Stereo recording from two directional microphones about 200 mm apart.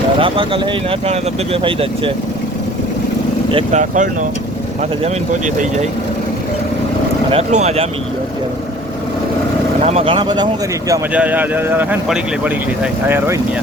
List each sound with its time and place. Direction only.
0.2 s speech: 25° right (ahead or behind)
3.5 s speech: 35° right (ahead or behind)
7.3 s speech: 30° right (ahead or behind)
9.8 s speech: 30° right (ahead or behind); by 13.4 s 10° right (ahead or behind)